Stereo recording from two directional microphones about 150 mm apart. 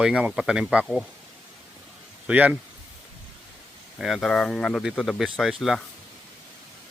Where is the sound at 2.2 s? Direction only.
10° right (ahead or behind).